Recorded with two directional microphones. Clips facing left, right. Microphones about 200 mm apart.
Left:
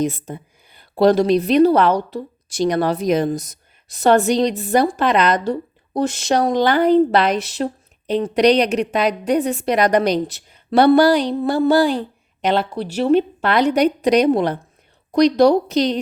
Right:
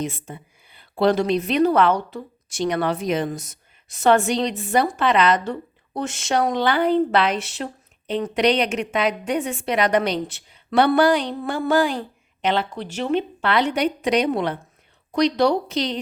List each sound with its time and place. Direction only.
0.0 s a woman's voice: 40° left (ahead or behind)